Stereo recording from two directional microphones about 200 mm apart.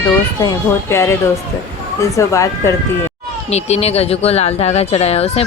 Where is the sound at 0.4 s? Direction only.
15° left (ahead or behind).